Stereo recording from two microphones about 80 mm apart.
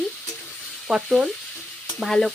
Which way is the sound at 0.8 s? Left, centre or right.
Centre.